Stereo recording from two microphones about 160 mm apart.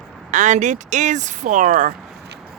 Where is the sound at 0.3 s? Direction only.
50° right (ahead or behind).